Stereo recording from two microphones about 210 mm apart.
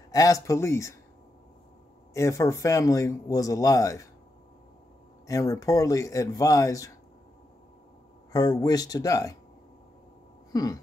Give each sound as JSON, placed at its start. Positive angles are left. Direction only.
{"t": 0.1, "sound": "a man's voice", "side_deg": 15}
{"t": 2.1, "sound": "a man's voice", "side_deg": 15}
{"t": 5.2, "sound": "a man's voice", "side_deg": 15}
{"t": 8.3, "sound": "a man's voice", "side_deg": 15}
{"t": 10.5, "sound": "a sound", "side_deg": 15}